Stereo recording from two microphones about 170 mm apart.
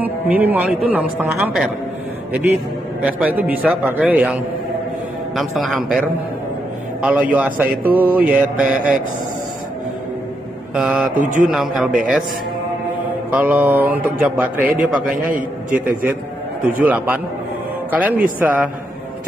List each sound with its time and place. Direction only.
0.0 s a woman's voice: 10° right (ahead or behind)
3.0 s a woman's voice: 10° right (ahead or behind)
10.7 s mantra: 5° right (ahead or behind)
11.4 s a man's voice: 5° right (ahead or behind)
13.3 s a woman's voice: 10° right (ahead or behind)
15.2 s a man's voice: 55° right (ahead or behind)
16.8 s a woman's voice: 10° right (ahead or behind)